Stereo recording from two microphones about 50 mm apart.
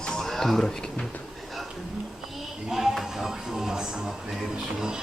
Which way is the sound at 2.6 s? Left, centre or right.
Centre.